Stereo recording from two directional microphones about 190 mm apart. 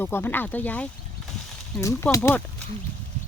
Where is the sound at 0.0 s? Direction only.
10° left (ahead or behind).